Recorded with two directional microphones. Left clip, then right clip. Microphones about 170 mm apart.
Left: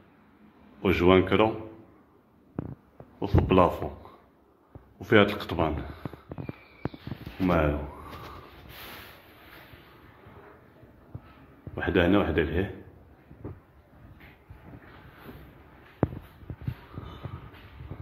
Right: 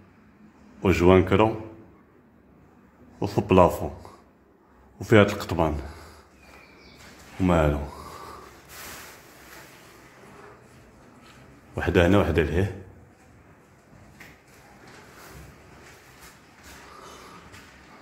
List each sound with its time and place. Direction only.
0.8 s speech: 15° right (ahead or behind)
3.2 s a man's voice: 20° right (ahead or behind)
4.9 s a man's voice: 20° right (ahead or behind)
7.4 s a man's voice: 20° right (ahead or behind)
11.7 s a man's voice: 20° right (ahead or behind)